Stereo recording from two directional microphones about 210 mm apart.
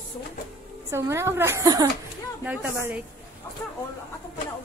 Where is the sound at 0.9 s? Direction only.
10° right (ahead or behind).